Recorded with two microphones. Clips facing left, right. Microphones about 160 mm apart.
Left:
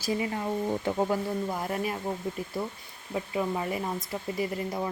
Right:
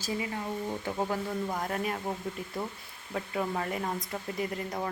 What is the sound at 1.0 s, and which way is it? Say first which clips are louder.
Speech: left 3 dB; 5° left (ahead or behind).